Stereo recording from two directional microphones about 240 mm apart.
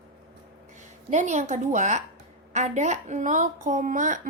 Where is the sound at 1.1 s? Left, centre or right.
Right.